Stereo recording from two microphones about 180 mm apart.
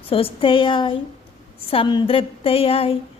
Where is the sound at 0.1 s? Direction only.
30° left (ahead or behind).